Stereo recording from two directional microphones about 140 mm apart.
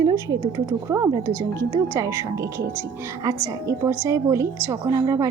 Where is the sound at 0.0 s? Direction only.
25° right (ahead or behind).